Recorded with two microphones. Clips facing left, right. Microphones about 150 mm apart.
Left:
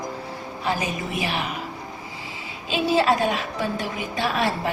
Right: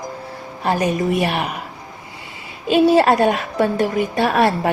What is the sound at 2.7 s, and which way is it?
A woman's voice, 55° right (ahead or behind).